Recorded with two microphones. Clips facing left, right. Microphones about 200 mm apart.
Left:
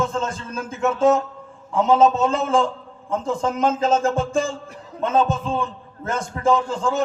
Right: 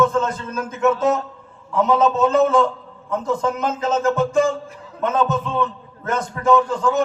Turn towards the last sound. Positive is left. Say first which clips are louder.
# right 3 dB
turn(degrees=25)  # may be behind; listen again after turning